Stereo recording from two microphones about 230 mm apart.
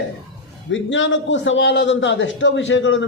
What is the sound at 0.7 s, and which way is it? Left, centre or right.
A man's voice, left.